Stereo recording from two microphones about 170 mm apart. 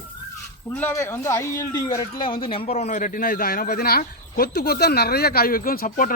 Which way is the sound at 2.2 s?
30° left (ahead or behind).